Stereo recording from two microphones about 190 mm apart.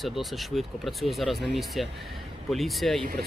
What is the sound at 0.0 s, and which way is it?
Speech, centre (ahead or behind).